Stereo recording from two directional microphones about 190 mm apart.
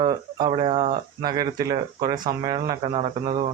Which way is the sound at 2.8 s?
30° right (ahead or behind).